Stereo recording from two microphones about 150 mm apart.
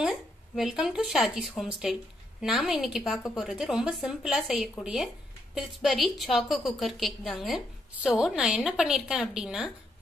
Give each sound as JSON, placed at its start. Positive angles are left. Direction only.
{"t": 0.0, "sound": "a woman's voice", "side_deg": 0}